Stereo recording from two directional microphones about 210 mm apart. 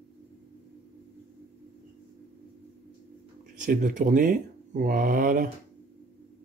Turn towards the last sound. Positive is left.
turn(degrees=-40)  # may be behind; listen again after turning